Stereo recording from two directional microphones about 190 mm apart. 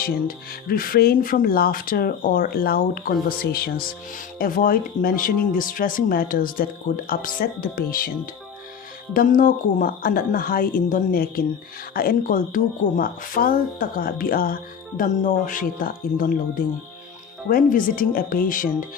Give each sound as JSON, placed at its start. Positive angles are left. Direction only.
{"t": 0.0, "sound": "speech", "side_deg": 50}
{"t": 9.1, "sound": "speech", "side_deg": 45}